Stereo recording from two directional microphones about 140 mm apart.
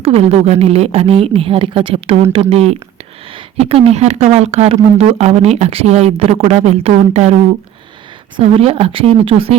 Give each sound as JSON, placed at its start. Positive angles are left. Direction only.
{"t": 0.0, "sound": "speech", "side_deg": -45}
{"t": 8.4, "sound": "speech", "side_deg": -40}